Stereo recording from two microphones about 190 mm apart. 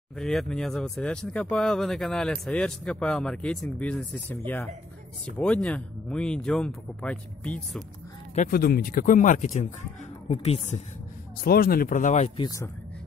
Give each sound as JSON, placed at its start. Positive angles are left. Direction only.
{"t": 0.1, "sound": "speech", "side_deg": 5}
{"t": 5.4, "sound": "speech", "side_deg": 5}
{"t": 8.4, "sound": "a woman's voice", "side_deg": 50}
{"t": 11.4, "sound": "speech", "side_deg": 50}
{"t": 12.4, "sound": "speech", "side_deg": 15}